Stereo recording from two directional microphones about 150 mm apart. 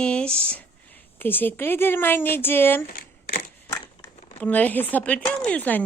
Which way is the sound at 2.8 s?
85° left.